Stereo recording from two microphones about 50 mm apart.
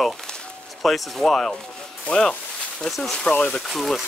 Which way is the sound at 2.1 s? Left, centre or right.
Left.